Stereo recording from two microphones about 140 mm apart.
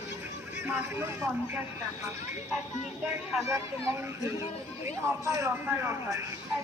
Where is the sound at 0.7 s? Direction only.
15° right (ahead or behind).